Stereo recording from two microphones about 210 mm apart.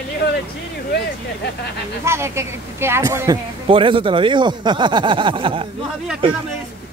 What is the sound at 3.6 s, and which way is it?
Speech, 25° right (ahead or behind).